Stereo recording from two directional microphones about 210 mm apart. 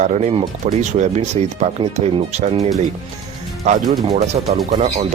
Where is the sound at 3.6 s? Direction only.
30° right (ahead or behind).